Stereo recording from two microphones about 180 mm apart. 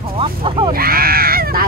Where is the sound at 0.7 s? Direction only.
55° right (ahead or behind).